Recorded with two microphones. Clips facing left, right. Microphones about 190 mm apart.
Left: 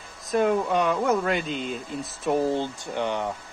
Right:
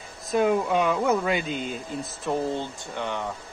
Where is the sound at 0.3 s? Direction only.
5° right (ahead or behind).